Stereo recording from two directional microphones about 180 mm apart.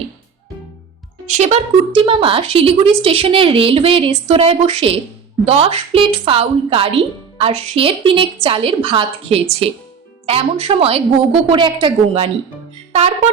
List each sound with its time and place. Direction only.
1.4 s a woman's voice: 35° right (ahead or behind)